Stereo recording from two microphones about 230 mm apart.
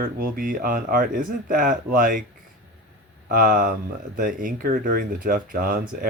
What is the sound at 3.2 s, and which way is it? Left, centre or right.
Speech, right.